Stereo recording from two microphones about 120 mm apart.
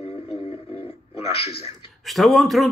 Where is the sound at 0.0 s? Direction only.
50° left (ahead or behind).